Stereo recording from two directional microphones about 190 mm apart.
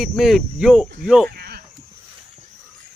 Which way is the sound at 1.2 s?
55° right (ahead or behind).